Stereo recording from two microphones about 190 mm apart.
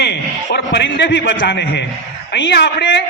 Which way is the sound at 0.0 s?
60° left (ahead or behind).